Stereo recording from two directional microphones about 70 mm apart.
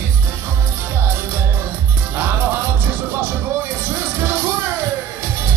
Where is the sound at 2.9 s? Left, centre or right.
Right.